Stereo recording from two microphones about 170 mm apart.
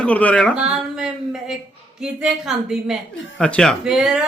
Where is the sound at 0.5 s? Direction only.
5° right (ahead or behind).